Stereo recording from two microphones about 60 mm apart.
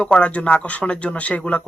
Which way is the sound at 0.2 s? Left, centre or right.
Left.